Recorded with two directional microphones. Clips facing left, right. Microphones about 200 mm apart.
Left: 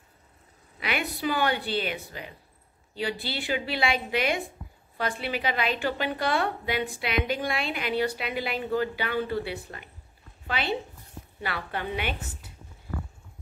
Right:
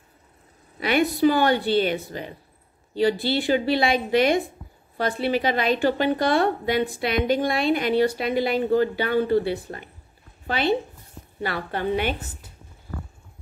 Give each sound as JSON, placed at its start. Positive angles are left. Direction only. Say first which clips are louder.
{"t": 0.7, "sound": "a woman's voice", "louder": "right 10 dB", "side_deg": -40}